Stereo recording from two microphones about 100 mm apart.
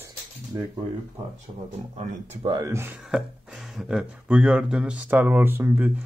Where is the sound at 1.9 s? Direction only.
90° right.